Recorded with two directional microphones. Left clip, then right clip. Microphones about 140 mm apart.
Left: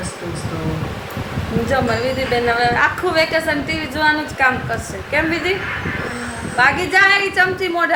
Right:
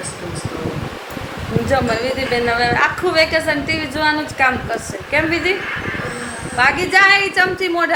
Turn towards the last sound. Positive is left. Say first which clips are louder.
# even
turn(degrees=-30)  # may be behind; listen again after turning